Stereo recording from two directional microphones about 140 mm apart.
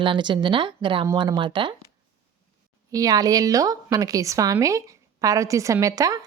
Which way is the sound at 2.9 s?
25° right (ahead or behind).